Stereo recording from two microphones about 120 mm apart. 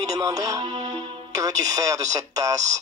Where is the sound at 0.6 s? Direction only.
65° right (ahead or behind).